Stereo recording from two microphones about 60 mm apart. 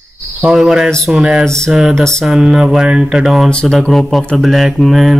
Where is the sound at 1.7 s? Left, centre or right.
Centre.